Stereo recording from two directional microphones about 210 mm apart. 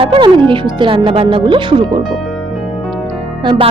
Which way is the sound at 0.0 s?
25° right (ahead or behind).